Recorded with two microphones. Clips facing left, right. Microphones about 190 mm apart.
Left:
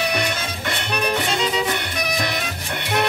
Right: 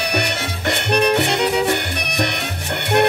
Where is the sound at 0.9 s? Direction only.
70° right (ahead or behind).